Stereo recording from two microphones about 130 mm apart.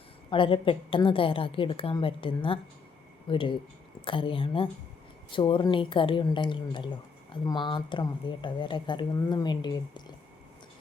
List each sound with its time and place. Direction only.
0.3 s a woman's voice: 40° left (ahead or behind)